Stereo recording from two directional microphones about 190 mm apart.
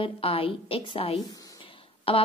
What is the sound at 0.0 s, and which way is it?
A woman's voice, 30° left (ahead or behind).